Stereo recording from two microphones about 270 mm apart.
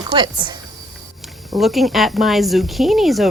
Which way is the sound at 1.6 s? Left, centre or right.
Centre.